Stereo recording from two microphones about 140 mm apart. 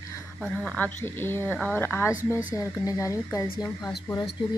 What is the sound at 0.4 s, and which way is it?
A woman's voice, 5° left (ahead or behind).